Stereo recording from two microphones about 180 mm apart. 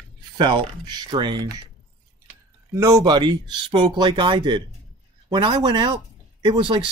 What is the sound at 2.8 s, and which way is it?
Speech, 20° right (ahead or behind).